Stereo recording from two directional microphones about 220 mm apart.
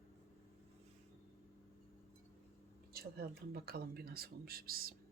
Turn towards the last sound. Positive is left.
turn(degrees=-40)  # may be behind; listen again after turning